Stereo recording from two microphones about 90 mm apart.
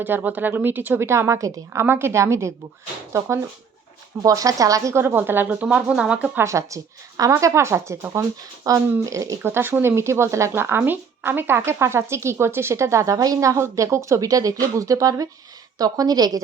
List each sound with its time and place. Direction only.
0.0 s a woman's voice: 20° right (ahead or behind)
6.3 s speech: 35° right (ahead or behind)
8.7 s speech: 40° right (ahead or behind)
9.4 s a woman's voice: 25° right (ahead or behind); by 16.4 s 45° right (ahead or behind)